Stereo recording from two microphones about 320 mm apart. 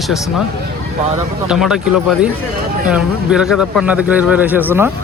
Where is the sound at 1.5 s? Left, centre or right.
Centre.